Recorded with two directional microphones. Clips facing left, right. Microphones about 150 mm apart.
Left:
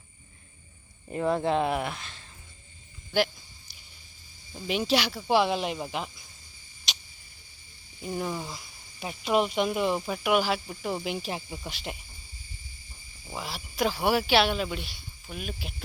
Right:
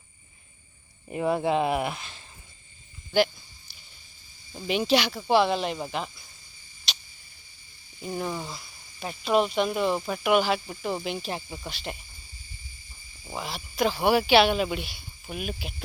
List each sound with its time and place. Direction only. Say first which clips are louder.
1.1 s speech: right 1 dB; 10° right (ahead or behind)
4.5 s speech: right 3 dB; 5° right (ahead or behind)
6.9 s tick-tock: right 1 dB; 15° left (ahead or behind)
8.0 s speech: right 1 dB; centre (ahead or behind)
11.7 s speech: right 2 dB; 15° left (ahead or behind)
13.3 s speech: right 2 dB; 5° left (ahead or behind)